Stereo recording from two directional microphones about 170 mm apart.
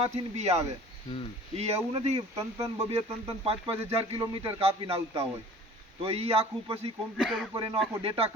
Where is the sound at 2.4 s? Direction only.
20° right (ahead or behind).